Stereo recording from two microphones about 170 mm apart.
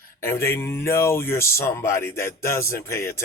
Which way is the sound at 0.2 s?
15° left (ahead or behind).